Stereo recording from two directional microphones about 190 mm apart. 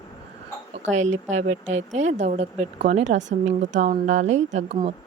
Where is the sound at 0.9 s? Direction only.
40° right (ahead or behind).